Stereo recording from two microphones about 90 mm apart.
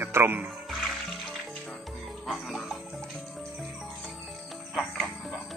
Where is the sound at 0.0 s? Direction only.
25° right (ahead or behind).